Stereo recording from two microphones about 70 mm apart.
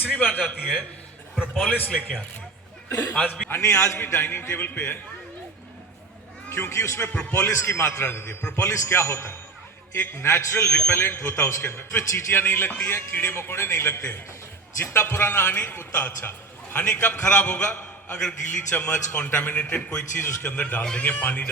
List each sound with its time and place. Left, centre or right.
1.5 s a man's voice: left
3.5 s a man's voice: left
6.5 s a man's voice: left
7.1 s a man's voice: left
7.4 s a man's voice: left